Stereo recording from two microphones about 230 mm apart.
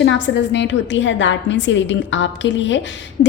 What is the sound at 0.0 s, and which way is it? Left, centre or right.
A woman's voice, left.